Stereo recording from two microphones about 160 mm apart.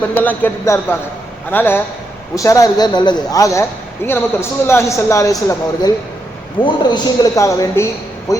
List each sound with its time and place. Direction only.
0.1 s a man's voice: 10° left (ahead or behind)